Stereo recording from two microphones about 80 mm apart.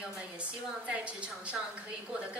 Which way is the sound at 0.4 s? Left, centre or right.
Centre.